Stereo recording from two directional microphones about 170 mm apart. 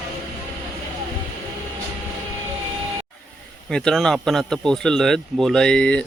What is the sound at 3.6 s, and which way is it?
Speech, 5° left (ahead or behind).